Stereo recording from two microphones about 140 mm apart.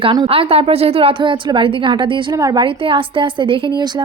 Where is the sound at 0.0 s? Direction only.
40° right (ahead or behind).